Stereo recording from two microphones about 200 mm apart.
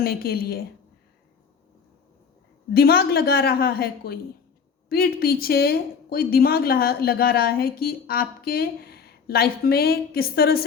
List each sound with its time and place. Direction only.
0.0 s speech: 50° left (ahead or behind)
2.7 s speech: 50° left (ahead or behind)